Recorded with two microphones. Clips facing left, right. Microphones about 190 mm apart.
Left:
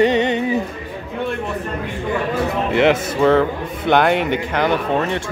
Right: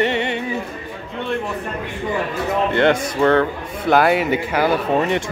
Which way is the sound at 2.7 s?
5° left (ahead or behind).